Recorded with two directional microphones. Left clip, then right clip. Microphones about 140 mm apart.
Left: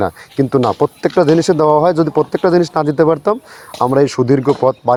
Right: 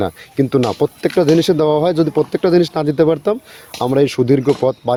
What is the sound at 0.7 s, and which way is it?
Speech, 5° right (ahead or behind).